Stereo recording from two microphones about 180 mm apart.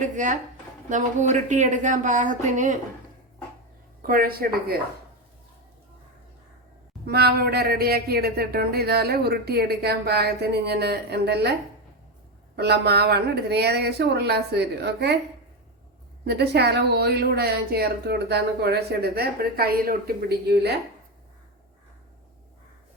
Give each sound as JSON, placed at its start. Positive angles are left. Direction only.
{"t": 0.0, "sound": "speech", "side_deg": -45}
{"t": 4.0, "sound": "speech", "side_deg": -55}
{"t": 7.0, "sound": "speech", "side_deg": -65}
{"t": 12.5, "sound": "speech", "side_deg": -65}
{"t": 16.2, "sound": "speech", "side_deg": -65}